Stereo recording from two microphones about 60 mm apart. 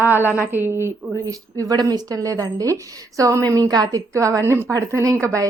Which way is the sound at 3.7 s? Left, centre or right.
Right.